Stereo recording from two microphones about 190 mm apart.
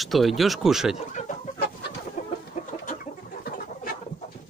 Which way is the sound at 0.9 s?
40° left (ahead or behind).